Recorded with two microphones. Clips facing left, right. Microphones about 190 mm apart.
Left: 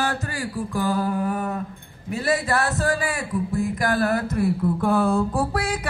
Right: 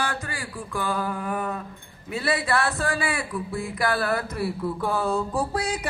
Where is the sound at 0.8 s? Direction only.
40° left (ahead or behind).